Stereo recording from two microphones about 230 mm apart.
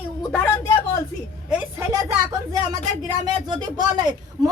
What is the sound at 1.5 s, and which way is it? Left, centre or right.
Speech, centre.